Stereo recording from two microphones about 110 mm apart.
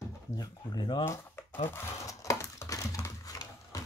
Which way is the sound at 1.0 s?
20° left (ahead or behind).